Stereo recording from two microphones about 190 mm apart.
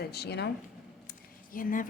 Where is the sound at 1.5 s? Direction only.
45° left (ahead or behind).